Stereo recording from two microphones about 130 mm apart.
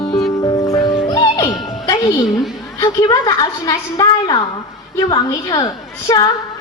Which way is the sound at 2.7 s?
30° left (ahead or behind).